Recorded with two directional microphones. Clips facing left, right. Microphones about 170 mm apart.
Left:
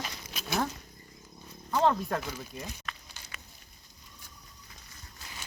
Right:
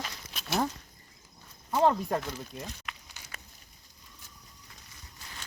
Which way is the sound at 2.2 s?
5° left (ahead or behind).